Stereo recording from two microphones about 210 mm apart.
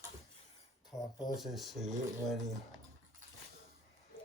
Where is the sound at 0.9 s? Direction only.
15° left (ahead or behind).